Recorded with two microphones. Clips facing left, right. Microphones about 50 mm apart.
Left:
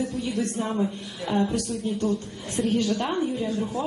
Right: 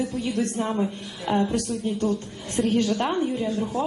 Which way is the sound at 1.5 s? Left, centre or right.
Right.